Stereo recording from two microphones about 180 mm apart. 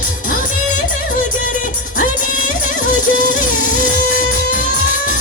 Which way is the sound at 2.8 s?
45° left (ahead or behind).